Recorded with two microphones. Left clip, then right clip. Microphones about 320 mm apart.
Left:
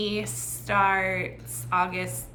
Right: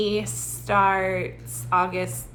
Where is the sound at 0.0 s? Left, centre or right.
Centre.